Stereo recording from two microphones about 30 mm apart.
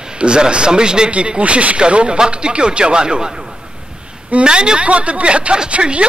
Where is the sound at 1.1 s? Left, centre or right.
Right.